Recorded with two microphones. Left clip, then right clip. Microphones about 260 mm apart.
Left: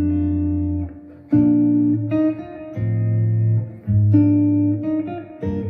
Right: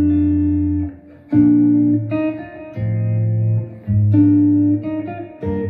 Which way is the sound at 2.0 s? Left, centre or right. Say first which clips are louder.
Left 1 dB; left.